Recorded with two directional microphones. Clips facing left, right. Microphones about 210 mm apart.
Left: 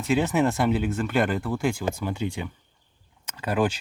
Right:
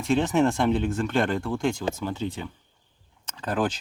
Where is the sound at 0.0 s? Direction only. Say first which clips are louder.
Right 1 dB; 5° left (ahead or behind).